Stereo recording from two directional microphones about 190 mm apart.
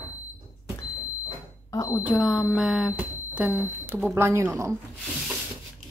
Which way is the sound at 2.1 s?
Centre (ahead or behind).